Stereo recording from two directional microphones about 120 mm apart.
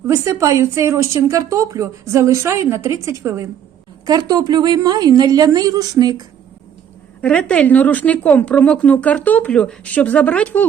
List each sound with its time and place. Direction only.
0.1 s a woman's voice: 25° right (ahead or behind)
7.2 s a woman's voice: 10° left (ahead or behind)